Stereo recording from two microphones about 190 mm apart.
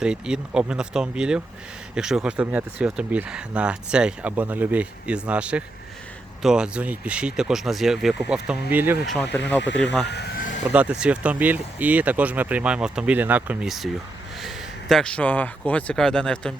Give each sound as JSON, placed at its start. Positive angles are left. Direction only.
{"t": 0.0, "sound": "speech", "side_deg": -5}
{"t": 10.1, "sound": "vehicle", "side_deg": 60}
{"t": 10.7, "sound": "speech", "side_deg": -5}